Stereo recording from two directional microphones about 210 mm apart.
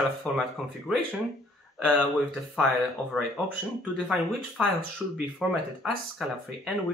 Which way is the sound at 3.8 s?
5° right (ahead or behind).